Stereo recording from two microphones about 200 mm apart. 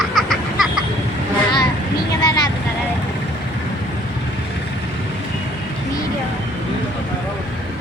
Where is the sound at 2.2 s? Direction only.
20° left (ahead or behind).